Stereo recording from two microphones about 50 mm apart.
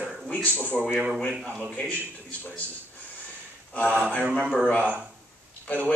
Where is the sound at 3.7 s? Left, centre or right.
Left.